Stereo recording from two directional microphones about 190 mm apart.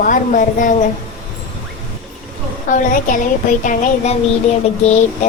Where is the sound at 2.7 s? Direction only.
45° left (ahead or behind).